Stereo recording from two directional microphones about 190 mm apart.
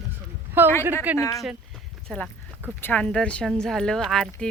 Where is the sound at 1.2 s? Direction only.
15° left (ahead or behind).